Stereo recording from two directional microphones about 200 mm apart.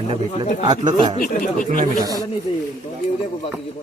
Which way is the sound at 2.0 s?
20° right (ahead or behind).